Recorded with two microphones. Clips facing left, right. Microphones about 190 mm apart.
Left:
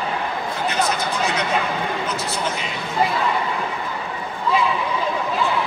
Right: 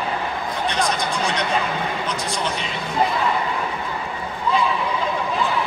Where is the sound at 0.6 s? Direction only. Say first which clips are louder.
Left 1 dB; 5° left (ahead or behind).